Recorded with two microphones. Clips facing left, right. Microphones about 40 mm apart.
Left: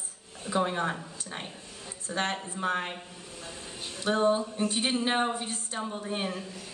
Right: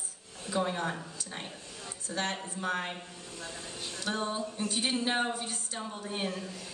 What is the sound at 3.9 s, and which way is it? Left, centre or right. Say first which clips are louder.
A woman's voice: left 8 dB; left.